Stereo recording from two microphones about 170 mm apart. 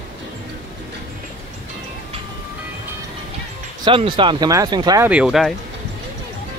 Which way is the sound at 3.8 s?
30° right (ahead or behind).